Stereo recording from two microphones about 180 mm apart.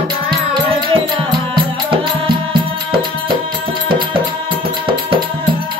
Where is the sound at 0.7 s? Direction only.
30° right (ahead or behind).